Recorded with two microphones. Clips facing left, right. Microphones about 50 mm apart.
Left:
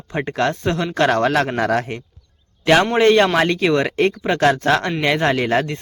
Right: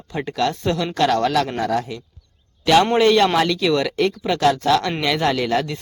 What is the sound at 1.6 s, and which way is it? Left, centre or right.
Speech, left.